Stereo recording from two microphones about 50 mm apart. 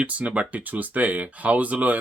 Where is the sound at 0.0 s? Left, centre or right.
Right.